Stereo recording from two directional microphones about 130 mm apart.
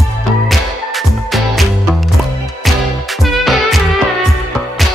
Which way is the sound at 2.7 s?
Centre (ahead or behind).